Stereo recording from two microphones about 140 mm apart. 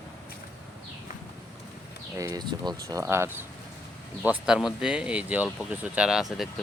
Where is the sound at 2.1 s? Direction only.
25° right (ahead or behind).